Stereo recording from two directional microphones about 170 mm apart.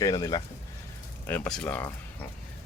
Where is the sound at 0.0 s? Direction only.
20° left (ahead or behind).